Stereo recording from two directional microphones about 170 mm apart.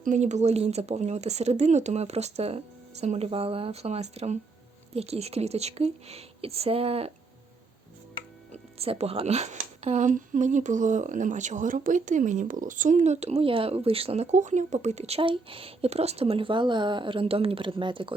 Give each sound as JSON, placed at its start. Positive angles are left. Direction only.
{"t": 0.0, "sound": "speech", "side_deg": -45}
{"t": 8.5, "sound": "speech", "side_deg": -40}